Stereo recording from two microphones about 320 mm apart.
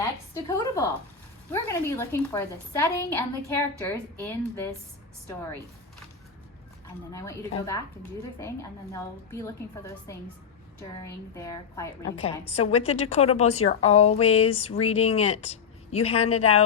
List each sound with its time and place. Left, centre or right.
0.4 s a woman's voice: centre
7.1 s a woman's voice: centre